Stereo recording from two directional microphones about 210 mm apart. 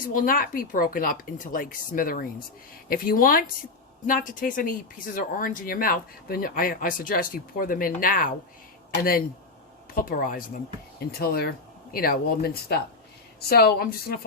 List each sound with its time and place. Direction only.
0.1 s speech: 40° left (ahead or behind)
9.9 s speech: 40° left (ahead or behind)